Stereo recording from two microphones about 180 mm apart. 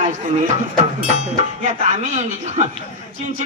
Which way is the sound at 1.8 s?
40° right (ahead or behind).